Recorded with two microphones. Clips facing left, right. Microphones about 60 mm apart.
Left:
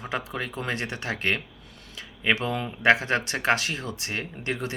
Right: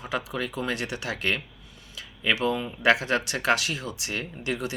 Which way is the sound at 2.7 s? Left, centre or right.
Left.